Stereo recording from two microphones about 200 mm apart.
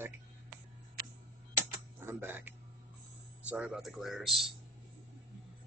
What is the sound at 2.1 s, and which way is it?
Speech, 10° right (ahead or behind).